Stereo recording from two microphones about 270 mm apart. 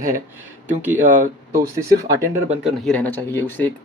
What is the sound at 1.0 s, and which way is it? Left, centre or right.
Speech, right.